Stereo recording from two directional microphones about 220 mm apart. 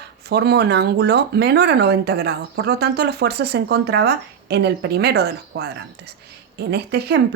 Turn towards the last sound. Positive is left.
turn(degrees=-50)  # may be behind; listen again after turning